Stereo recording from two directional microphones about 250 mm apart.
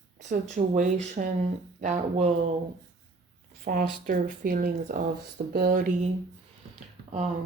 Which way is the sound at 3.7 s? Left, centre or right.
Right.